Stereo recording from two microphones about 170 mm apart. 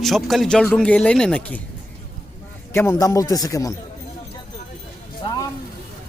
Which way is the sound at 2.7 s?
15° left (ahead or behind).